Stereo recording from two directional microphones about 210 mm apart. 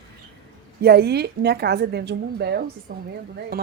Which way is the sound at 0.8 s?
50° right (ahead or behind).